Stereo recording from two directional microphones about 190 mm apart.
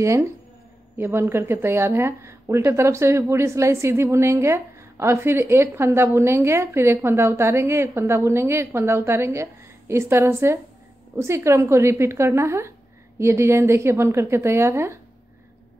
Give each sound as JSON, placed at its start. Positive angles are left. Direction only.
{"t": 0.0, "sound": "speech", "side_deg": -15}